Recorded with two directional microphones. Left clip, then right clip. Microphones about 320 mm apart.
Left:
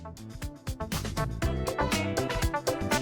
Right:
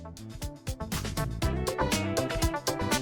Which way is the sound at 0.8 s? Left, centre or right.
Centre.